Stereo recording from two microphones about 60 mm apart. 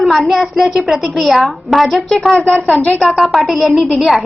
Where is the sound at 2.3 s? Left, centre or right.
Centre.